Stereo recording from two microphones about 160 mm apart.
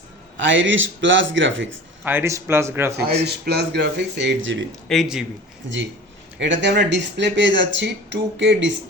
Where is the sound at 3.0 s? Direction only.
90° right.